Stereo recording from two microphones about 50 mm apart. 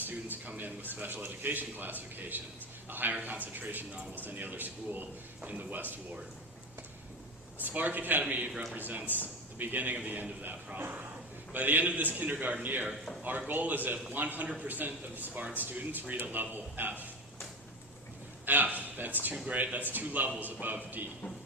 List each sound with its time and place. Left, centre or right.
0.0 s a man's voice: right
7.6 s a man's voice: right
18.4 s a sound: right
19.0 s a man's voice: right